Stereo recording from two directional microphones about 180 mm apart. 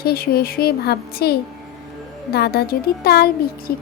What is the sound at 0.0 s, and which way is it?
Speech, 60° left (ahead or behind).